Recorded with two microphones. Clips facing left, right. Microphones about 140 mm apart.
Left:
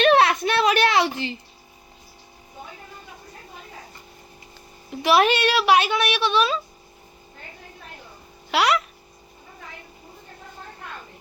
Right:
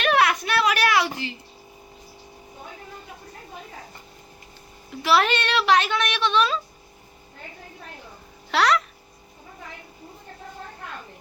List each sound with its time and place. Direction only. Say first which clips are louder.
0.0 s a sound: left 4 dB; 25° left (ahead or behind)
4.9 s a woman's voice: left 3 dB; 15° left (ahead or behind)
8.4 s a child's voice: even; 5° left (ahead or behind)